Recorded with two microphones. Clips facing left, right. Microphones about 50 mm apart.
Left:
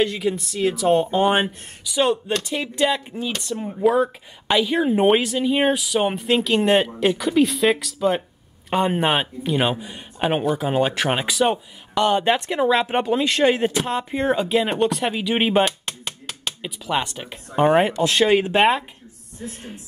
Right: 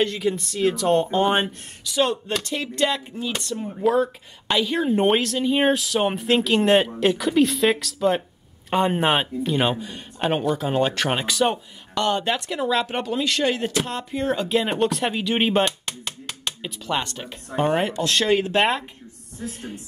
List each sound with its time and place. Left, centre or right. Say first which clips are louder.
0.0 s speech: left 1 dB; centre
12.4 s speech: left 4 dB; left; by 18.9 s centre